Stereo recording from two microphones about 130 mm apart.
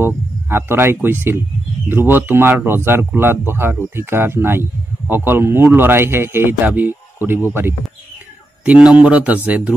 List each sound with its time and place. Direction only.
0.0 s speech: 20° right (ahead or behind)